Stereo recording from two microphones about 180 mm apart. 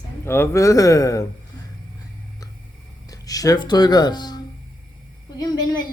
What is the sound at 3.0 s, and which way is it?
A man's voice, 20° left (ahead or behind).